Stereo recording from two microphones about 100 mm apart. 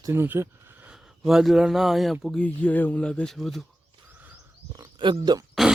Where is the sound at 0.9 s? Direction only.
5° right (ahead or behind).